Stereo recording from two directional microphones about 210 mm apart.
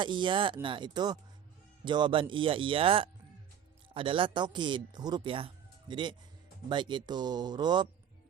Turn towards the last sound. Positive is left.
turn(degrees=-20)  # may be behind; listen again after turning